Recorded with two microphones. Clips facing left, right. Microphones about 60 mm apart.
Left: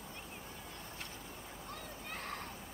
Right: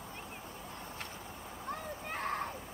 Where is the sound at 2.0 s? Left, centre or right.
Right.